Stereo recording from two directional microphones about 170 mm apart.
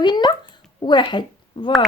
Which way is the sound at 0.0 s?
25° left (ahead or behind).